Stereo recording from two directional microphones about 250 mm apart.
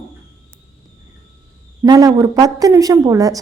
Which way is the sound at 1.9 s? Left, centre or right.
Centre.